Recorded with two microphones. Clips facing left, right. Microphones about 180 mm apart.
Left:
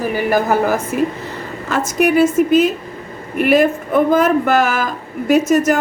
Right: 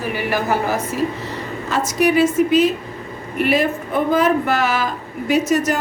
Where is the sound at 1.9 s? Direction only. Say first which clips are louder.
Left 2 dB; 50° left (ahead or behind).